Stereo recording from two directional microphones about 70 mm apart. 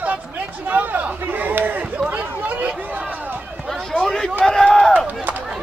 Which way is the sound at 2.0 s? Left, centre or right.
Right.